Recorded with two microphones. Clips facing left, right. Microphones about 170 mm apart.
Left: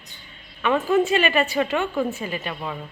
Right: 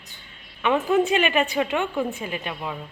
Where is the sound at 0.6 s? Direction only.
15° right (ahead or behind).